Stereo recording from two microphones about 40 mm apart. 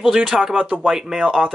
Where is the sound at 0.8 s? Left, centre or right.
Centre.